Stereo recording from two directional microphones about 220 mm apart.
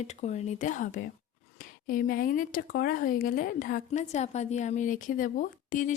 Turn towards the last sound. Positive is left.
turn(degrees=35)  # may be behind; listen again after turning